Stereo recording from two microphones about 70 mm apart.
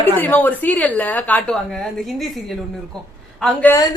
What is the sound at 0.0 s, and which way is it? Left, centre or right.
A woman's voice, left.